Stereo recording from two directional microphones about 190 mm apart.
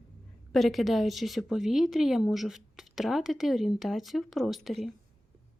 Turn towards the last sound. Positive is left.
turn(degrees=0)  # may be behind; listen again after turning